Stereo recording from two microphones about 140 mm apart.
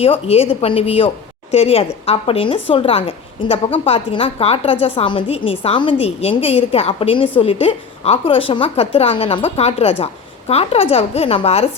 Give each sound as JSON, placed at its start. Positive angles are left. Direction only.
{"t": 0.0, "sound": "a woman's voice", "side_deg": 45}